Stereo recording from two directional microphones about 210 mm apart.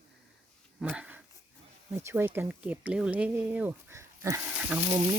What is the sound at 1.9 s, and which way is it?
Speech, 10° right (ahead or behind).